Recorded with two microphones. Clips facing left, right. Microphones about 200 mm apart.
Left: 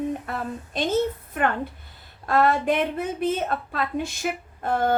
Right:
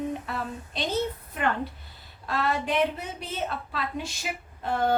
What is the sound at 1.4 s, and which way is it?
A woman's voice, 50° left (ahead or behind).